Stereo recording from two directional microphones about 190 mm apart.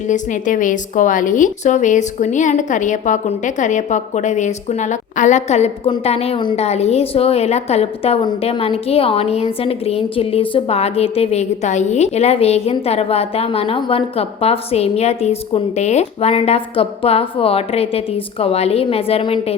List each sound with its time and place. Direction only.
0.1 s a woman's voice: 40° left (ahead or behind)